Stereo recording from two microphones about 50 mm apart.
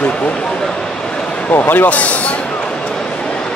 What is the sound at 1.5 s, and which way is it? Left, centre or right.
Speech, left.